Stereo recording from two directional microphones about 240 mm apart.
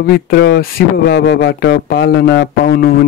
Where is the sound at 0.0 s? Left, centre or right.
Left.